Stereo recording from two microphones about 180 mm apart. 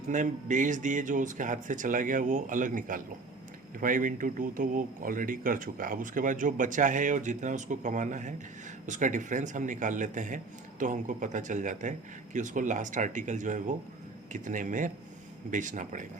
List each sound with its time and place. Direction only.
0.1 s a man's voice: 45° right (ahead or behind)